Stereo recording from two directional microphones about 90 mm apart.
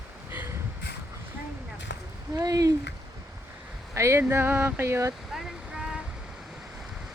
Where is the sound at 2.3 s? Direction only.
40° right (ahead or behind).